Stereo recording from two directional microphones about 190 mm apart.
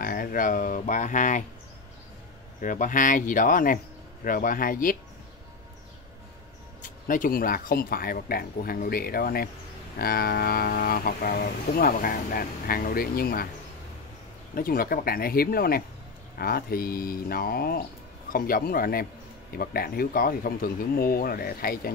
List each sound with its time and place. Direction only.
0.0 s speech: 45° left (ahead or behind)
2.6 s speech: 45° left (ahead or behind)
6.8 s speech: 45° left (ahead or behind)
14.5 s speech: 50° left (ahead or behind)